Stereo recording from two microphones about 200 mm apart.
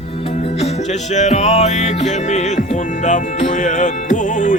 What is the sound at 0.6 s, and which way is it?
Music, 35° left (ahead or behind).